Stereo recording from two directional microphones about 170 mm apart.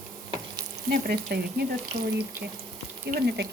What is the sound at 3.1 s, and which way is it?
Speech, 70° right (ahead or behind).